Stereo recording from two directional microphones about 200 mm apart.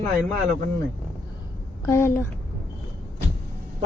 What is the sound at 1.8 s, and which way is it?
Child singing, 15° left (ahead or behind).